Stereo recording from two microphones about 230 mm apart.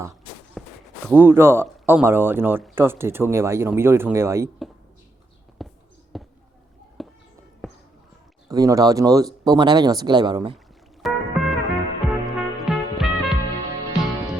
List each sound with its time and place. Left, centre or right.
0.6 s walk: centre
1.0 s speech: centre
5.6 s basketball bounce: centre
8.4 s speech: centre
11.0 s music: centre